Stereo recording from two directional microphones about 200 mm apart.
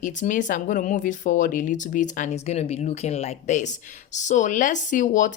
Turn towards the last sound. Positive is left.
turn(degrees=40)  # may be behind; listen again after turning